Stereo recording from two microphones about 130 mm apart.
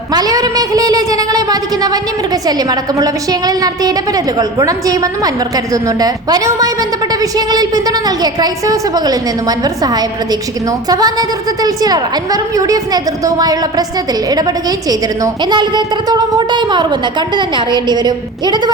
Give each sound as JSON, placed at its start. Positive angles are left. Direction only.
{"t": 0.1, "sound": "a woman's voice", "side_deg": -30}